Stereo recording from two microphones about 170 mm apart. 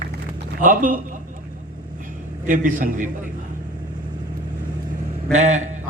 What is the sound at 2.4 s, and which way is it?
Speech, 50° right (ahead or behind).